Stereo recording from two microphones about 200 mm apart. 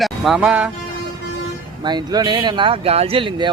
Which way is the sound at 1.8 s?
20° right (ahead or behind).